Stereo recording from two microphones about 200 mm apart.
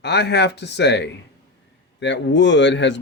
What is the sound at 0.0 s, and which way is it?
Speech, 55° left (ahead or behind).